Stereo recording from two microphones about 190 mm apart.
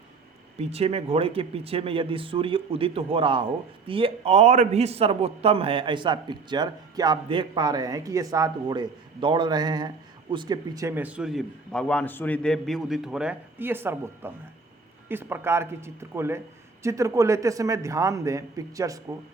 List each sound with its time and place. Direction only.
0.6 s a man's voice: 30° right (ahead or behind)